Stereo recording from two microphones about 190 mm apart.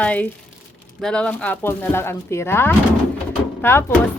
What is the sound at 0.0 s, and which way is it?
Speech, 5° left (ahead or behind).